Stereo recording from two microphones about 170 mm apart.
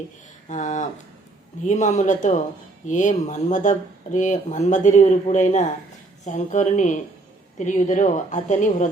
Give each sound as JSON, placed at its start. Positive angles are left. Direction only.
{"t": 0.4, "sound": "speech", "side_deg": 45}